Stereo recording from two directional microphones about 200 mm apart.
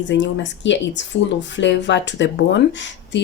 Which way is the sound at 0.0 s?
65° left (ahead or behind).